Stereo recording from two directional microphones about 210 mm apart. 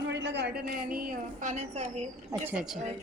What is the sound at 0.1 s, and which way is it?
A woman's voice, 55° right (ahead or behind).